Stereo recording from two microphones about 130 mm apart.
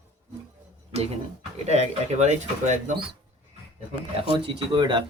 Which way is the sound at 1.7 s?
60° right (ahead or behind).